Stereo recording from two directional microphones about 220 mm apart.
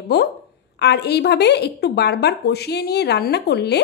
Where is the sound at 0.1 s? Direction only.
50° left (ahead or behind).